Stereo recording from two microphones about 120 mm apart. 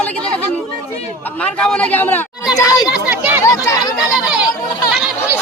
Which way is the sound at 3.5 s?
30° left (ahead or behind).